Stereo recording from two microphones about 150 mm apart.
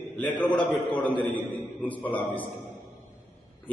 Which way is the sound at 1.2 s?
10° left (ahead or behind).